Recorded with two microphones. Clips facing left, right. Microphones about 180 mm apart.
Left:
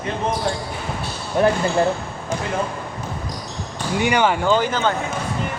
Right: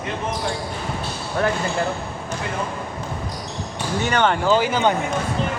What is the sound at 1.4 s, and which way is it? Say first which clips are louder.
Speech: left 5 dB; 20° left (ahead or behind).